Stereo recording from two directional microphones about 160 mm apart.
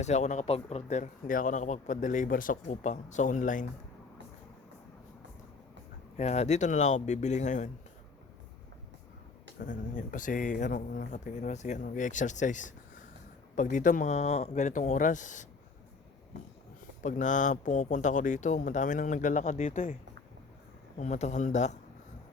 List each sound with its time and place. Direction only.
0.0 s speech: 45° left (ahead or behind)
2.6 s speech: 50° left (ahead or behind)
6.1 s speech: 45° left (ahead or behind)
9.6 s speech: 55° left (ahead or behind)
17.0 s speech: 50° left (ahead or behind)
19.7 s speech: 60° left (ahead or behind)
21.0 s speech: 45° left (ahead or behind)